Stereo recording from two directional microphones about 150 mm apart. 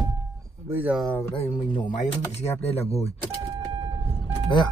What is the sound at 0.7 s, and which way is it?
Speech, 10° right (ahead or behind).